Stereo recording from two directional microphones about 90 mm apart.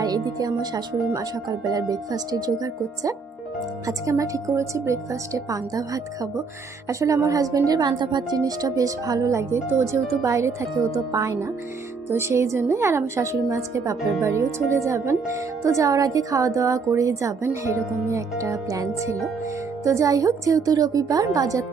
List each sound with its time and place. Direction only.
0.0 s a woman's voice: 45° right (ahead or behind)